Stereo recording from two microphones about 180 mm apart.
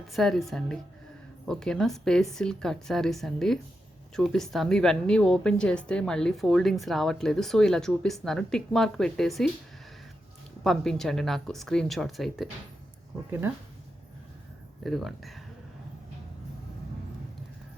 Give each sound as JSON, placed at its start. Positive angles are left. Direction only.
{"t": 0.1, "sound": "a woman's voice", "side_deg": 0}
{"t": 10.6, "sound": "a woman's voice", "side_deg": 0}
{"t": 14.8, "sound": "a woman's voice", "side_deg": 0}